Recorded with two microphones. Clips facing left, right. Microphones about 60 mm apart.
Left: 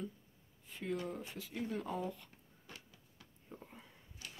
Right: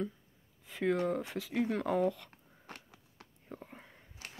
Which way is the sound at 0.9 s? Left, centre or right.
Right.